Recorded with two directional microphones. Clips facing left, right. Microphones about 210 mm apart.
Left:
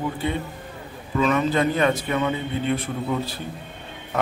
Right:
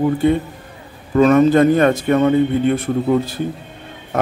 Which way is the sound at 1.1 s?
45° right (ahead or behind).